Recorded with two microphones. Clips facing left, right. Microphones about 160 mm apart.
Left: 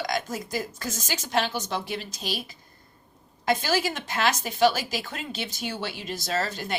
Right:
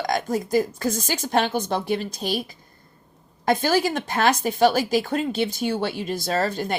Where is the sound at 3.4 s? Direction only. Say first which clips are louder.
Right 5 dB; 50° right (ahead or behind).